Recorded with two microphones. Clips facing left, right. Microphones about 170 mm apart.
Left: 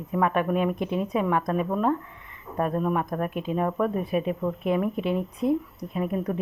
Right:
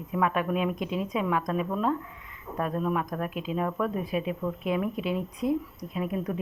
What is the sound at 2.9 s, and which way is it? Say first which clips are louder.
A woman's voice: left 3 dB; 40° left (ahead or behind).